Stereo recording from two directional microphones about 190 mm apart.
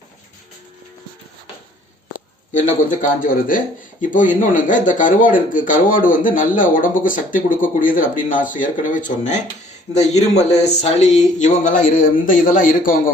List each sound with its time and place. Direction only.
3.2 s speech: 45° left (ahead or behind)